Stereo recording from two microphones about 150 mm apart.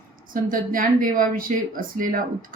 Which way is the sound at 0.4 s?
65° right (ahead or behind).